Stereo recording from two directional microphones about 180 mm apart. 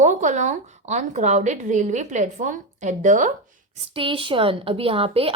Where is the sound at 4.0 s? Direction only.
30° right (ahead or behind).